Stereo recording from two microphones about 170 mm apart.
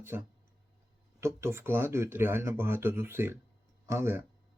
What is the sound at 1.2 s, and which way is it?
Speech, 15° right (ahead or behind).